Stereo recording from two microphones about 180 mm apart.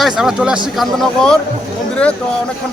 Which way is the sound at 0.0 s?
Centre (ahead or behind).